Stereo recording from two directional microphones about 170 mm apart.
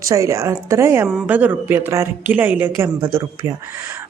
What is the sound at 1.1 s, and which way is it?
A man's voice, 5° right (ahead or behind).